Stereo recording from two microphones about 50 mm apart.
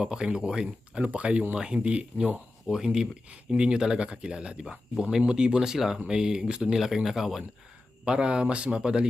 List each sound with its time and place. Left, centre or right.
0.0 s speech: centre
2.6 s speech: centre
8.0 s speech: centre